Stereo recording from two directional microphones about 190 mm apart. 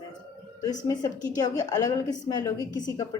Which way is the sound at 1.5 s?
20° left (ahead or behind).